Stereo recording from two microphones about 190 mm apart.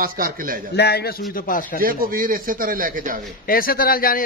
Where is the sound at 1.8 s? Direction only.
50° right (ahead or behind).